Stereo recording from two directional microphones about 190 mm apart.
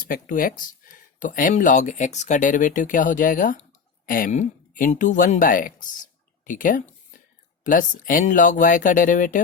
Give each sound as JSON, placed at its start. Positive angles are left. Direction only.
{"t": 0.1, "sound": "speech", "side_deg": 45}